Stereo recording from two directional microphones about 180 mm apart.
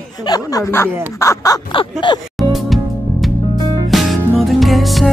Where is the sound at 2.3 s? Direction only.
Centre (ahead or behind).